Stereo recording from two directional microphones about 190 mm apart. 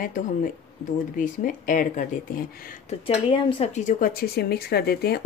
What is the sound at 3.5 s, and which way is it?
Speech, 35° left (ahead or behind).